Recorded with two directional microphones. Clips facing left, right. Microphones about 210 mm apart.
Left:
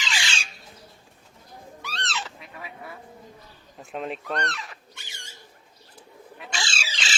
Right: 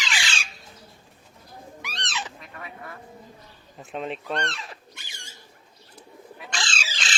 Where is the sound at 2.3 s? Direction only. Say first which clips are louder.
Even; 5° left (ahead or behind).